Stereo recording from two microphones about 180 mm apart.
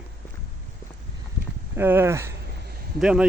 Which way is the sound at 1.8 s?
10° right (ahead or behind).